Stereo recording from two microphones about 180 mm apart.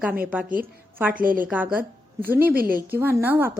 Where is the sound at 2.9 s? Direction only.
15° right (ahead or behind).